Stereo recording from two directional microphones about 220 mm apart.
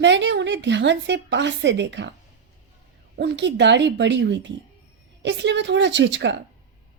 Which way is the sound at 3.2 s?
50° right (ahead or behind).